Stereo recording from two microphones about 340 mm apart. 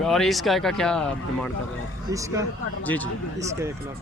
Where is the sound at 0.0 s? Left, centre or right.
Centre.